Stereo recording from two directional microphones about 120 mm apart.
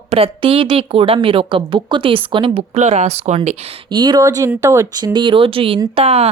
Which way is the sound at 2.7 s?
75° right (ahead or behind).